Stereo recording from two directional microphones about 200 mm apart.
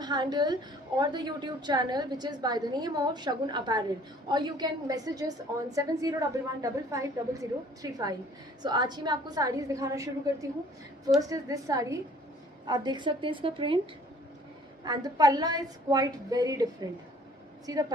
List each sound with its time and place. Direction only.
0.0 s a woman's voice: 20° right (ahead or behind)
14.9 s a woman's voice: 20° right (ahead or behind)
17.6 s a woman's voice: 20° right (ahead or behind)